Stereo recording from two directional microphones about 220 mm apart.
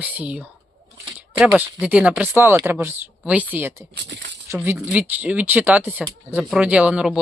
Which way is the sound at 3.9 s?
50° right (ahead or behind).